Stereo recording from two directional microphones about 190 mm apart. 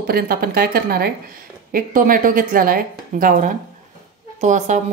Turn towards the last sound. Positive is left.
turn(degrees=-40)  # may be behind; listen again after turning